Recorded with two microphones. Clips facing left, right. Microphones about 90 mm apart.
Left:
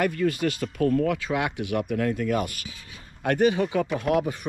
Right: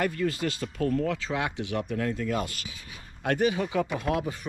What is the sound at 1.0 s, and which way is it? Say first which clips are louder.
Speech: left 4 dB; 60° left (ahead or behind).